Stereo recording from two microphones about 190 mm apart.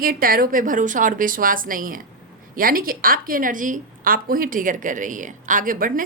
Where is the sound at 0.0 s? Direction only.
50° right (ahead or behind).